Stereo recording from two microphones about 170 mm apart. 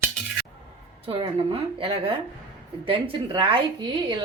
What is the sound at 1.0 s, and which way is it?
A woman's voice, 35° right (ahead or behind).